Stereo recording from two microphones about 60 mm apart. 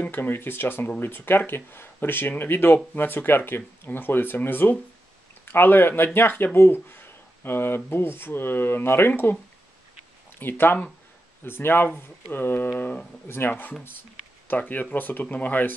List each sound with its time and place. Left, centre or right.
0.0 s speech: left
10.4 s speech: left